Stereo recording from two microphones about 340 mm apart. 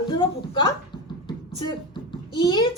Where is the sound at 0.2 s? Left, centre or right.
Centre.